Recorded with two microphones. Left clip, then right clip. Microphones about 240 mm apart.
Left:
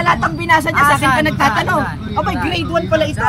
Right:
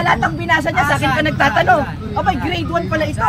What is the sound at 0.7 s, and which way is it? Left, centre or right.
Speech, left.